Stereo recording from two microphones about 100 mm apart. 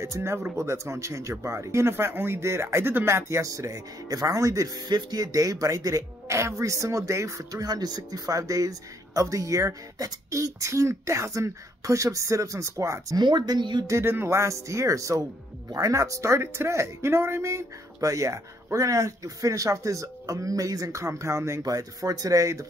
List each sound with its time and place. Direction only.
0.0 s speech: 25° right (ahead or behind)
13.2 s speech: 50° right (ahead or behind)
13.8 s speech: 25° right (ahead or behind)